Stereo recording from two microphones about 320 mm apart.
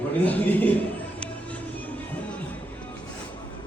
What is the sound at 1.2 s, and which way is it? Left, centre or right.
Music, centre.